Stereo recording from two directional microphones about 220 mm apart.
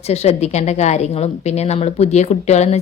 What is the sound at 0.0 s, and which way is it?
A woman's voice, 30° left (ahead or behind).